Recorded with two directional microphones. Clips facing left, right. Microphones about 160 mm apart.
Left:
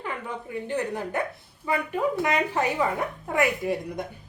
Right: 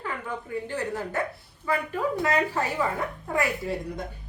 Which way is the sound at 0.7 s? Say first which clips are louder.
Left 4 dB; 15° left (ahead or behind).